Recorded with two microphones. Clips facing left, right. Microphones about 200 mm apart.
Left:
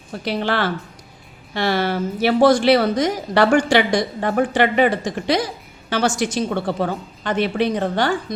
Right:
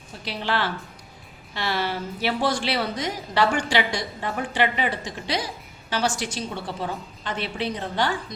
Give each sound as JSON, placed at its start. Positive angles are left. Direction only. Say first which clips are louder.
{"t": 0.1, "sound": "a woman's voice", "louder": "left 6 dB", "side_deg": 50}